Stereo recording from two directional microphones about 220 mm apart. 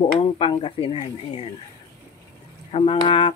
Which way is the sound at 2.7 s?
25° left (ahead or behind).